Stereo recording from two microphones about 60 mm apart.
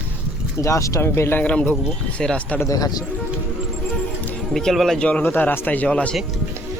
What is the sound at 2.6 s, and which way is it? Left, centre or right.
Speech, left.